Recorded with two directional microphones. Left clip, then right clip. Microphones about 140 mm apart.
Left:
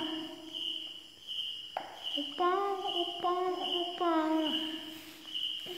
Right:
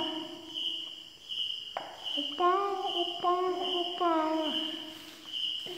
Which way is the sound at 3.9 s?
15° left (ahead or behind).